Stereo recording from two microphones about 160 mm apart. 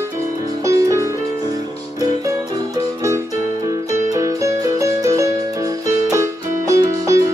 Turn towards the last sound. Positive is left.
turn(degrees=-20)  # may be behind; listen again after turning